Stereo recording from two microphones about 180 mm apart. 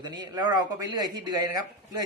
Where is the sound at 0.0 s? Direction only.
25° right (ahead or behind).